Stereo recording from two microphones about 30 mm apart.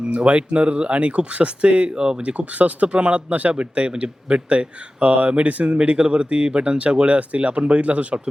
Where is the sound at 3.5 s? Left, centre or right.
Right.